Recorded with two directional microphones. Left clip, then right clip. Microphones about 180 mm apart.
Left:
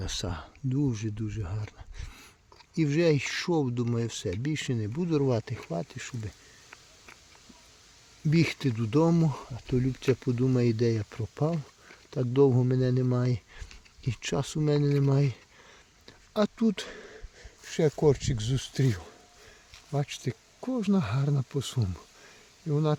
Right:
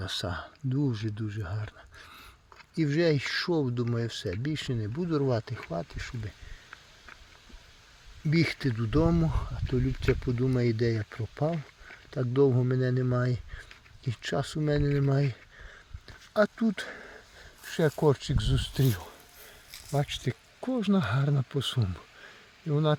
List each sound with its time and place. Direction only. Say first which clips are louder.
0.0 s speech: right 2 dB; 35° left (ahead or behind)
8.3 s speech: even; 35° left (ahead or behind)
9.2 s speech: left 1 dB; 30° left (ahead or behind)
16.0 s a sound: right 3 dB; 40° left (ahead or behind)
18.0 s speech: left 1 dB; 30° left (ahead or behind)